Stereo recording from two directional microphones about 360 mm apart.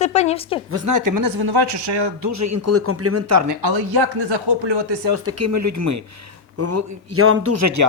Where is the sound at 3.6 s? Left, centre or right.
Right.